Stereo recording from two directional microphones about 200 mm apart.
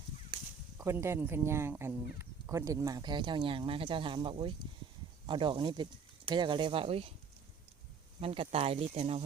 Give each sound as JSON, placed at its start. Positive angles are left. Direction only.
{"t": 0.8, "sound": "speech", "side_deg": -15}
{"t": 8.2, "sound": "speech", "side_deg": -30}